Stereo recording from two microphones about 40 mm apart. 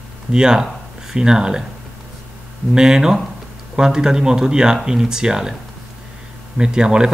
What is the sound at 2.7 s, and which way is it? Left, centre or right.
Speech, centre.